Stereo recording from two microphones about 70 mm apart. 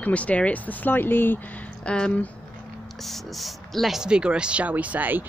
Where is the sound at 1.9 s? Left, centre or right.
Centre.